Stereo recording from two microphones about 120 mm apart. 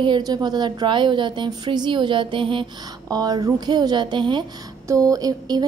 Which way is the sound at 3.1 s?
35° right (ahead or behind).